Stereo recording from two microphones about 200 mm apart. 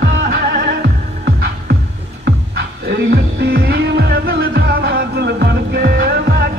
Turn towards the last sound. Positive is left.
turn(degrees=-50)  # may be behind; listen again after turning